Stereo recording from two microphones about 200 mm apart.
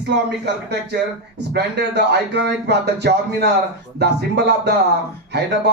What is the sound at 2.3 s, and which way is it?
Speech, 60° right (ahead or behind).